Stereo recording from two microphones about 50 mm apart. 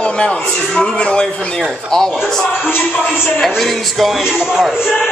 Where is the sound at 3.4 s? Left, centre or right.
Centre.